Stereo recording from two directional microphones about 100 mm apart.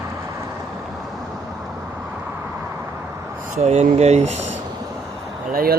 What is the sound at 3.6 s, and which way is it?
Speech, 90° right.